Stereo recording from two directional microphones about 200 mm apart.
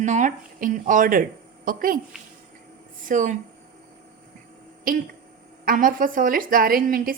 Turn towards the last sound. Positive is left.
turn(degrees=-45)  # may be behind; listen again after turning